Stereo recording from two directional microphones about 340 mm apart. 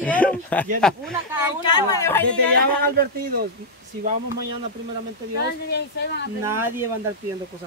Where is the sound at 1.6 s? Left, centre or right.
Centre.